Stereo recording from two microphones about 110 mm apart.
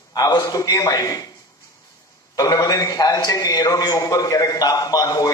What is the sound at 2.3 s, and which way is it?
A man's voice, 35° left (ahead or behind).